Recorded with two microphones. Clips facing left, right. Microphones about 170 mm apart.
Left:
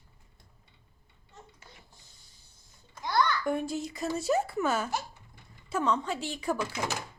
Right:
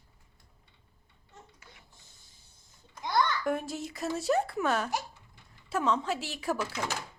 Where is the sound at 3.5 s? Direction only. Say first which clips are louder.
Left 1 dB; centre (ahead or behind).